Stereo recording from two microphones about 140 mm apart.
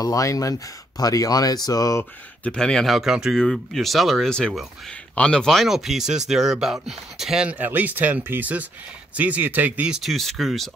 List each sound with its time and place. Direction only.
0.0 s speech: 25° left (ahead or behind)
2.4 s speech: 5° left (ahead or behind)